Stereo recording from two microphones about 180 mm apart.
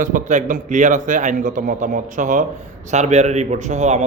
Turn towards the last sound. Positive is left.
turn(degrees=-40)  # may be behind; listen again after turning